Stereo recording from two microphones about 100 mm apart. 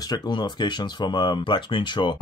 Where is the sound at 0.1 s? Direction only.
45° left (ahead or behind).